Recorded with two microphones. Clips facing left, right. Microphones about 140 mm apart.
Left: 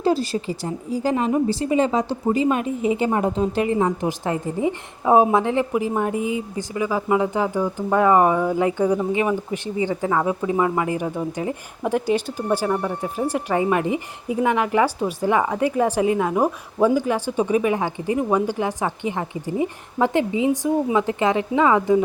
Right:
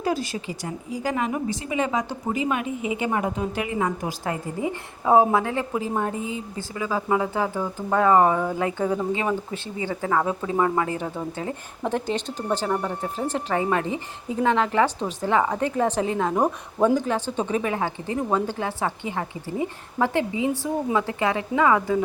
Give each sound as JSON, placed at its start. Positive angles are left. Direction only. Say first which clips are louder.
{"t": 0.0, "sound": "a woman's voice", "louder": "left 5 dB", "side_deg": 30}